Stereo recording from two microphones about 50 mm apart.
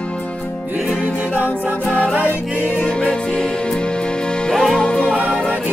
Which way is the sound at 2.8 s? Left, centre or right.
Left.